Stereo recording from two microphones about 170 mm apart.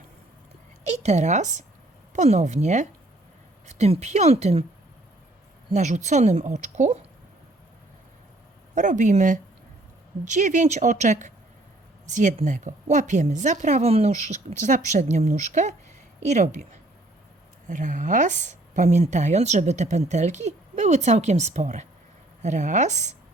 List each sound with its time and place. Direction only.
0.9 s a woman's voice: 40° right (ahead or behind)
5.7 s speech: 45° right (ahead or behind)
8.7 s speech: 45° right (ahead or behind)
17.7 s speech: 45° right (ahead or behind)